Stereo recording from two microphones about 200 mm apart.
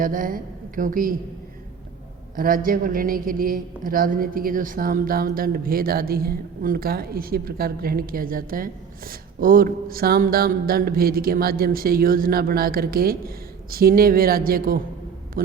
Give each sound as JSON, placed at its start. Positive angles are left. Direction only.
{"t": 0.0, "sound": "a woman's voice", "side_deg": -45}
{"t": 2.3, "sound": "a man's voice", "side_deg": -45}